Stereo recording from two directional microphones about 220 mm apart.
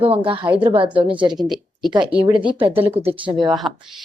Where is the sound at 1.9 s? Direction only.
20° right (ahead or behind).